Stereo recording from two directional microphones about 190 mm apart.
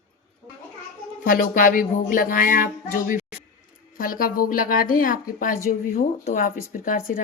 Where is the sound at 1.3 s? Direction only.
45° left (ahead or behind).